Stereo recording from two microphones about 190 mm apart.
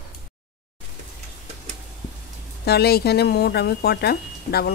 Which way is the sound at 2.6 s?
60° left (ahead or behind).